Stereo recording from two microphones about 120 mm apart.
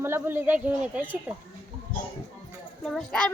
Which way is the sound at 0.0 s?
20° right (ahead or behind).